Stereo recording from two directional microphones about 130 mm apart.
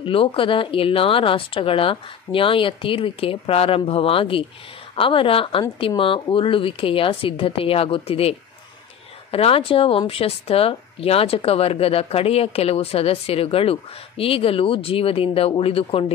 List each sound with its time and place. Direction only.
0.0 s speech: 45° left (ahead or behind)